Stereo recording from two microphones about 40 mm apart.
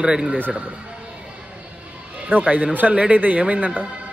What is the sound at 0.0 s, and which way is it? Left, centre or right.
Speech, right.